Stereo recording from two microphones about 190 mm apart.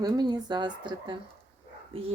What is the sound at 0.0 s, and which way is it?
Speech, 20° right (ahead or behind).